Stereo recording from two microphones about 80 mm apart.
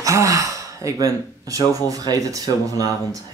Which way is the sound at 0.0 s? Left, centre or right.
Right.